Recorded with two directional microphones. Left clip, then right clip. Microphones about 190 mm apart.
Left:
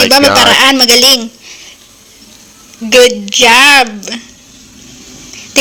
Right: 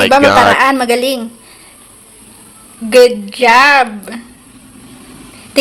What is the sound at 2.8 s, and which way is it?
A woman's voice, 35° left (ahead or behind).